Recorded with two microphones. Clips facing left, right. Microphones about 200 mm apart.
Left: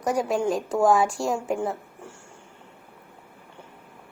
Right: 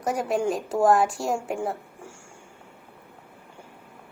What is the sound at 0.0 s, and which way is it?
A woman's voice, centre (ahead or behind).